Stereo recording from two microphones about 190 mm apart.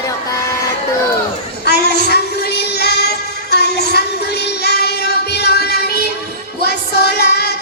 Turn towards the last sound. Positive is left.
turn(degrees=60)  # may be behind; listen again after turning